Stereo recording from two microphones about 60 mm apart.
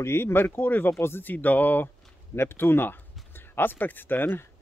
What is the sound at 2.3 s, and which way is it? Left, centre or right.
Speech, left.